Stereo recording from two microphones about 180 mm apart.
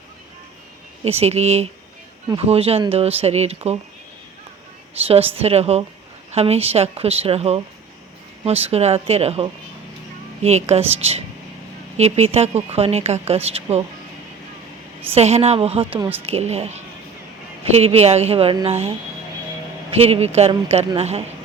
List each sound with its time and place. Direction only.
1.0 s a woman's voice: 35° right (ahead or behind)
5.0 s a woman's voice: 30° right (ahead or behind)
15.1 s a woman's voice: 35° right (ahead or behind)